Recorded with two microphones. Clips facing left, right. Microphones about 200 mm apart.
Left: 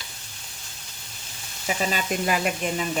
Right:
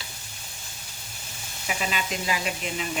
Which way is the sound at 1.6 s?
40° left (ahead or behind).